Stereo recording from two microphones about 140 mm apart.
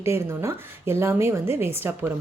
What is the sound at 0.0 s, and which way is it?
A woman's voice, 20° right (ahead or behind).